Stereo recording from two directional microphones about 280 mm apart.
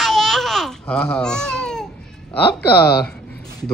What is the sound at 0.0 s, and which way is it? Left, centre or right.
Babbling, centre.